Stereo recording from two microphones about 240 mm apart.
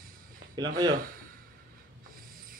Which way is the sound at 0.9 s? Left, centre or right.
Right.